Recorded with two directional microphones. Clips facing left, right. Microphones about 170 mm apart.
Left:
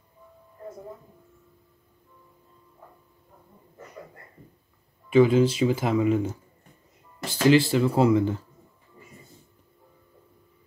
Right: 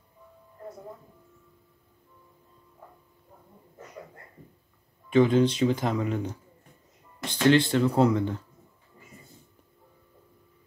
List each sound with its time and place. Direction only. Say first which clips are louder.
5.1 s speech: left 2 dB; 5° left (ahead or behind)